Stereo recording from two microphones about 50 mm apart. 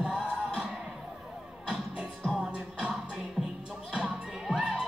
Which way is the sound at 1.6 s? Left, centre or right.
Centre.